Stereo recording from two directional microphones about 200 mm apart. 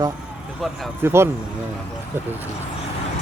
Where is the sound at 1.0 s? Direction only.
10° right (ahead or behind).